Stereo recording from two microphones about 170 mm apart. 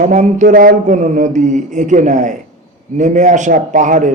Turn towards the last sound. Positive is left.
turn(degrees=-50)  # may be behind; listen again after turning